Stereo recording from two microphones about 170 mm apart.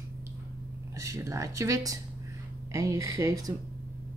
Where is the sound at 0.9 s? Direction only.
15° right (ahead or behind).